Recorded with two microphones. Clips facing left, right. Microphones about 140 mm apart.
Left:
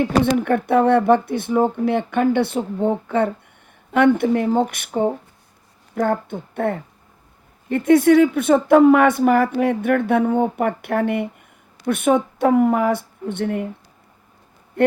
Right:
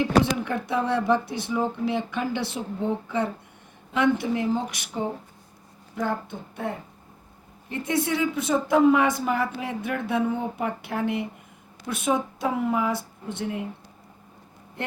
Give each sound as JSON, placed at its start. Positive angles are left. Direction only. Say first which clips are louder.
{"t": 0.0, "sound": "speech", "louder": "left 4 dB", "side_deg": 60}